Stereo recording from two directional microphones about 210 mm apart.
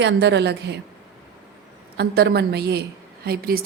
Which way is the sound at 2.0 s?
50° right (ahead or behind).